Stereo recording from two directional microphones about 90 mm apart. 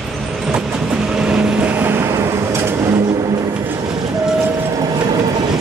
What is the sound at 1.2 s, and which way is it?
Vehicle, 20° right (ahead or behind).